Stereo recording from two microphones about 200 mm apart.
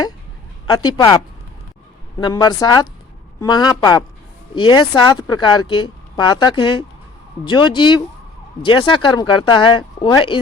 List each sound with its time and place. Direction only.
0.7 s speech: 20° left (ahead or behind)